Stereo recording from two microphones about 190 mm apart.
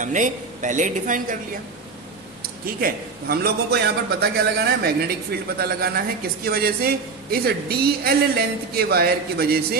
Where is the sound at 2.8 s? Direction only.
55° right (ahead or behind).